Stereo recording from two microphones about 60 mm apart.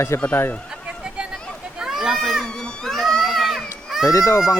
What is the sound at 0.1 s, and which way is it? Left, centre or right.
Speech, left.